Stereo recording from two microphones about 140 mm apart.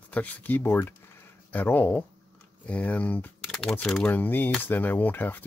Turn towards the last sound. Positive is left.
turn(degrees=15)  # may be behind; listen again after turning